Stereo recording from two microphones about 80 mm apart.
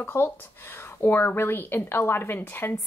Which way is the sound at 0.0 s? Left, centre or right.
Left.